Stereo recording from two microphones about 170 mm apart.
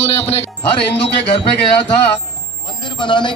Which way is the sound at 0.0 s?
35° left (ahead or behind).